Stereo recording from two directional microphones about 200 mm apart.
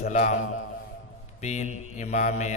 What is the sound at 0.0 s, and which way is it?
Mantra, 35° left (ahead or behind).